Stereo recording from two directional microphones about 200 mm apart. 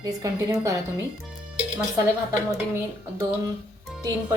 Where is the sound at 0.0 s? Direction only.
20° right (ahead or behind).